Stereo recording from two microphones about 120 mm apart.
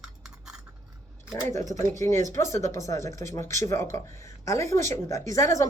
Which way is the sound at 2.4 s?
90° right.